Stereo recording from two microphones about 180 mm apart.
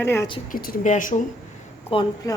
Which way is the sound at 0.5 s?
50° left (ahead or behind).